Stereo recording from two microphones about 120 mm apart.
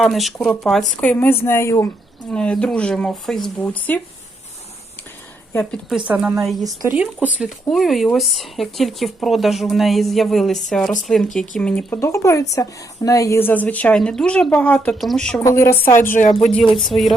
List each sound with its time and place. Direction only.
0.0 s speech: centre (ahead or behind)
1.0 s speech: 15° left (ahead or behind)
2.3 s speech: 10° left (ahead or behind)
6.1 s speech: 5° right (ahead or behind)
11.9 s speech: 25° left (ahead or behind); by 15.4 s 5° left (ahead or behind)
15.4 s speech: 25° left (ahead or behind)
16.3 s speech: 5° left (ahead or behind)